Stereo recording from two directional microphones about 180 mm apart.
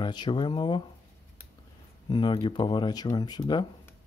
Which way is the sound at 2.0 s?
25° left (ahead or behind).